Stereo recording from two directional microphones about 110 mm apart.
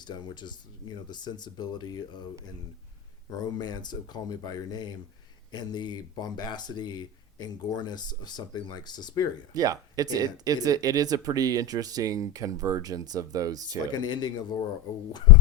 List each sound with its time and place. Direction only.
0.1 s speech: 40° left (ahead or behind)
3.2 s speech: 35° left (ahead or behind)
9.6 s speech: 35° right (ahead or behind)
13.9 s speech: 40° left (ahead or behind)